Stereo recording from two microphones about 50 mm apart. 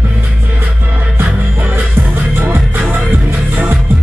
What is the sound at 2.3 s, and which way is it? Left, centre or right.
Music, right.